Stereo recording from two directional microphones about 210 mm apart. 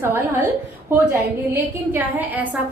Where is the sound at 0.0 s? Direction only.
10° right (ahead or behind).